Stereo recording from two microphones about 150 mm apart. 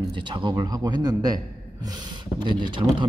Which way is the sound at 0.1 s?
30° right (ahead or behind).